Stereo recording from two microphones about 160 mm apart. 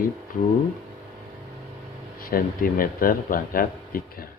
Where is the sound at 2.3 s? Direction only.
65° left (ahead or behind).